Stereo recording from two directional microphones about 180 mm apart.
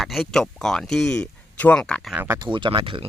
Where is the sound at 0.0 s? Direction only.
Centre (ahead or behind).